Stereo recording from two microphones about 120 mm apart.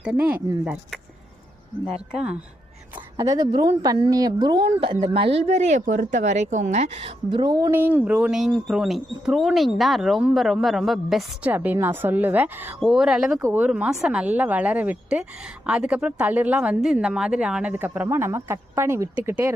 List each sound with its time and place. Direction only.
0.0 s speech: 10° right (ahead or behind)
3.2 s speech: 30° right (ahead or behind); by 7.1 s 65° right (ahead or behind)
7.3 s speech: 40° right (ahead or behind)
7.7 s speech: 15° right (ahead or behind); by 11.3 s centre (ahead or behind)
11.4 s speech: 15° right (ahead or behind)
12.8 s speech: 5° right (ahead or behind); by 19.5 s 20° right (ahead or behind)